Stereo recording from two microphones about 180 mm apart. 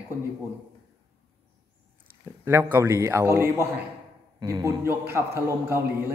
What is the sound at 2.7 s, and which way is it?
Speech, 15° right (ahead or behind).